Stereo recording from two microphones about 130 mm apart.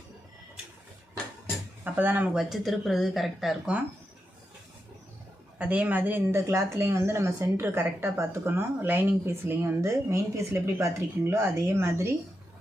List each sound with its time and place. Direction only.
1.8 s speech: 15° right (ahead or behind)
5.5 s speech: 10° right (ahead or behind)